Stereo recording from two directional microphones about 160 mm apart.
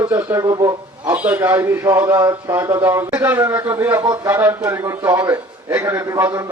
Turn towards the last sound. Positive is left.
turn(degrees=-15)  # may be behind; listen again after turning